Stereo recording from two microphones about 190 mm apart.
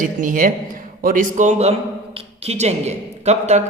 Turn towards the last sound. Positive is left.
turn(degrees=-35)  # may be behind; listen again after turning